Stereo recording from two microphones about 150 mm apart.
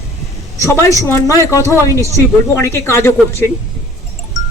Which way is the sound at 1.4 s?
20° left (ahead or behind).